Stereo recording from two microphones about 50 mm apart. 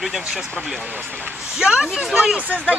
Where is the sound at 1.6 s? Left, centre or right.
Centre.